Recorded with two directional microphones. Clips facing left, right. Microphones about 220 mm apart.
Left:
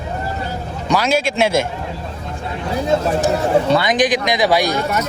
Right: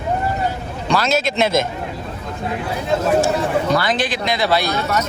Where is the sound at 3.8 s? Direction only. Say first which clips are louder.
Left 4 dB; 15° left (ahead or behind).